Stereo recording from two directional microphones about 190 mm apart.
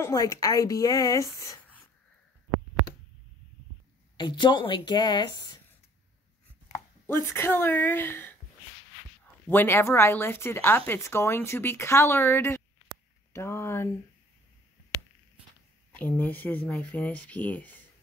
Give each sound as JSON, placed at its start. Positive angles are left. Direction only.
{"t": 0.0, "sound": "speech", "side_deg": 15}
{"t": 4.2, "sound": "speech", "side_deg": 25}
{"t": 6.7, "sound": "speech", "side_deg": 15}
{"t": 9.5, "sound": "speech", "side_deg": 10}
{"t": 13.3, "sound": "a sound", "side_deg": 15}
{"t": 16.0, "sound": "speech", "side_deg": 10}